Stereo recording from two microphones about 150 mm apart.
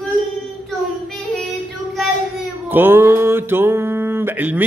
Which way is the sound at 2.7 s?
15° right (ahead or behind).